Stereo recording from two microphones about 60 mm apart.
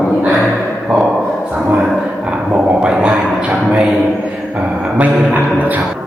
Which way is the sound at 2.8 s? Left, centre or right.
Centre.